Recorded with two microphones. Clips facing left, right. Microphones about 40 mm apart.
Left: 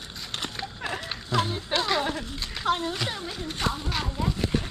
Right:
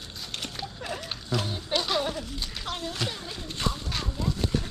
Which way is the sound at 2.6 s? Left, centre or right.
Left.